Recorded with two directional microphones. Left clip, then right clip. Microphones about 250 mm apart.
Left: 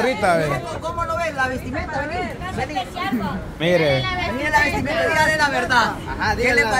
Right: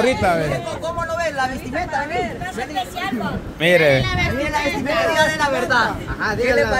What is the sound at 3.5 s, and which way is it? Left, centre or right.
Speech, right.